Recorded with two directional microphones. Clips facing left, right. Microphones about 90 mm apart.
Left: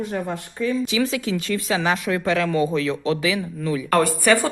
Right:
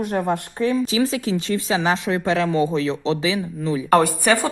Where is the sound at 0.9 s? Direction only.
35° right (ahead or behind).